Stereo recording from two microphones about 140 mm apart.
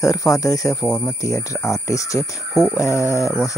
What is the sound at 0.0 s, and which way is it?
Speech, 25° left (ahead or behind).